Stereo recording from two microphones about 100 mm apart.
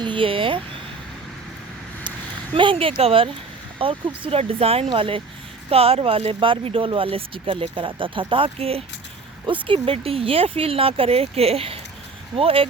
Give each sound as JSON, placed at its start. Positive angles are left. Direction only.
{"t": 0.0, "sound": "a sound", "side_deg": -55}
{"t": 2.6, "sound": "speech", "side_deg": -60}
{"t": 4.3, "sound": "speech", "side_deg": -80}
{"t": 4.9, "sound": "speech", "side_deg": -60}
{"t": 5.7, "sound": "speech", "side_deg": -75}
{"t": 9.5, "sound": "speech", "side_deg": -60}